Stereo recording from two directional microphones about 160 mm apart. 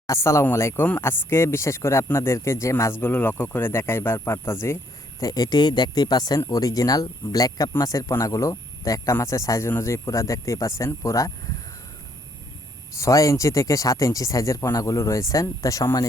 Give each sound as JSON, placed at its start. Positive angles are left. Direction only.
{"t": 0.1, "sound": "speech", "side_deg": 15}
{"t": 13.0, "sound": "speech", "side_deg": 20}